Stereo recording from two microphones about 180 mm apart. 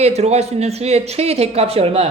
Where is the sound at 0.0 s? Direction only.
35° right (ahead or behind).